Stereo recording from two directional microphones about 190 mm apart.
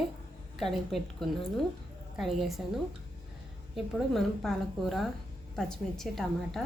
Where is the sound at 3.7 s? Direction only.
Centre (ahead or behind).